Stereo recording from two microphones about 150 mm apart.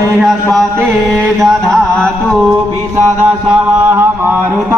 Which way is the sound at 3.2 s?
15° right (ahead or behind).